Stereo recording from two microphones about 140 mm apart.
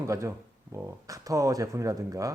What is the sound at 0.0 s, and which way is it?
Speech, 20° right (ahead or behind).